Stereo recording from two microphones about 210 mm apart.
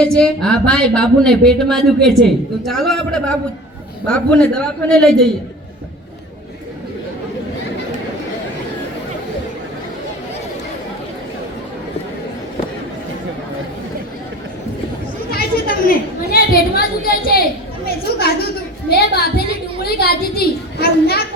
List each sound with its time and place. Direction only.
0.0 s speech: 5° left (ahead or behind)
15.3 s chatter: 45° left (ahead or behind)
17.8 s a woman's voice: 50° left (ahead or behind)